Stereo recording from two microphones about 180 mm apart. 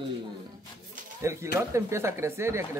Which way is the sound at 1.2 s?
15° right (ahead or behind).